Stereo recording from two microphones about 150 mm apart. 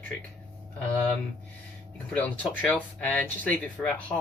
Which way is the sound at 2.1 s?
10° left (ahead or behind).